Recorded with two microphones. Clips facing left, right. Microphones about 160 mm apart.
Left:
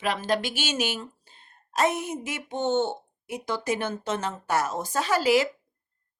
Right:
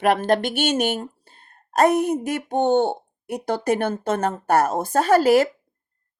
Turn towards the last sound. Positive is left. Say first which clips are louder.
# right 7 dB
turn(degrees=-55)  # may be behind; listen again after turning